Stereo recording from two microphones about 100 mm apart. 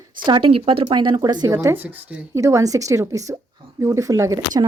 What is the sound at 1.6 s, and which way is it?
Speech, 20° right (ahead or behind).